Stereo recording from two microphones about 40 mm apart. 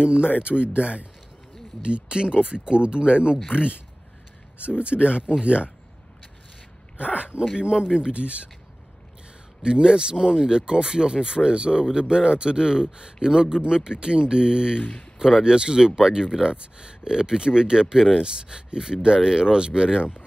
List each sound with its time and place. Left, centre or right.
0.0 s speech: right
4.6 s speech: right
7.5 s speech: right
9.6 s speech: right
14.8 s speech: left
15.1 s speech: centre